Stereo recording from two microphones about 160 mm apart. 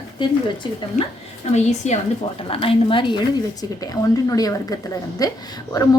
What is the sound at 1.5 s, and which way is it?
A woman's voice, 45° left (ahead or behind).